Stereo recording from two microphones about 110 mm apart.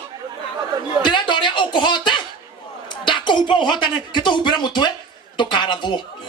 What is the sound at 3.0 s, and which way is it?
Speech, 45° left (ahead or behind).